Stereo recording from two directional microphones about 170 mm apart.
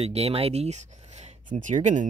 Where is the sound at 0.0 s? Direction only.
35° right (ahead or behind).